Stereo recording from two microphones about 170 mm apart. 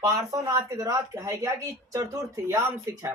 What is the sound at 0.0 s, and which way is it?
Speech, 20° right (ahead or behind).